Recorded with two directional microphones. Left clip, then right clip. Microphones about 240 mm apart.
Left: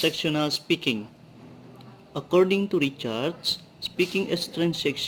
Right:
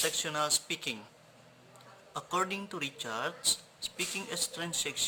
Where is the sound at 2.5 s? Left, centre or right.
Centre.